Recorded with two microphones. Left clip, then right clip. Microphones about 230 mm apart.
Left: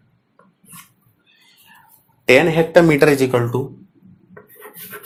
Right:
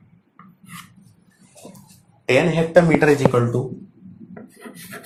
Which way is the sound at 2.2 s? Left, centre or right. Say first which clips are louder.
Left 5 dB; left.